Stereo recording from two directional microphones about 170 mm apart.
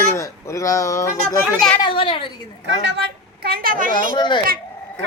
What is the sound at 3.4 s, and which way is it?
Speech, 60° right (ahead or behind).